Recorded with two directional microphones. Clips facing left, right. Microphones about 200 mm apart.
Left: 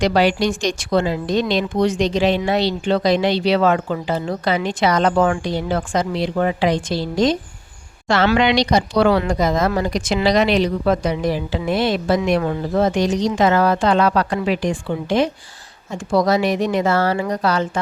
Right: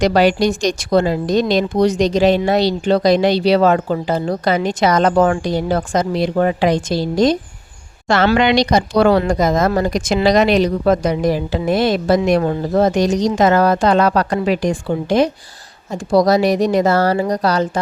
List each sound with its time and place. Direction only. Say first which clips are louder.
0.0 s a woman's voice: right 3 dB; 45° right (ahead or behind)